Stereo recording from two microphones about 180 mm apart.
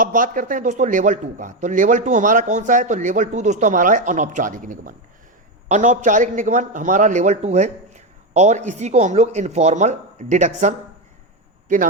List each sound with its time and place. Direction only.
0.0 s a man's voice: 50° right (ahead or behind)